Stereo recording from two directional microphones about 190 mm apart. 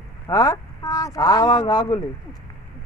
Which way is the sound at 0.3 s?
20° left (ahead or behind).